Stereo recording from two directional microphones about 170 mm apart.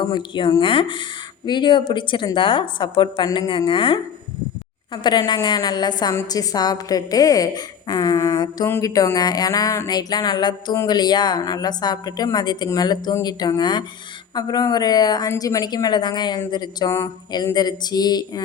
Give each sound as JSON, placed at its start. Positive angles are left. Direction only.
{"t": 0.0, "sound": "a woman's voice", "side_deg": 25}
{"t": 5.0, "sound": "a woman's voice", "side_deg": 25}